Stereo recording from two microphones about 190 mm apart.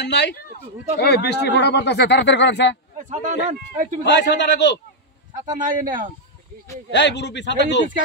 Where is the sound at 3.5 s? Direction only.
40° right (ahead or behind).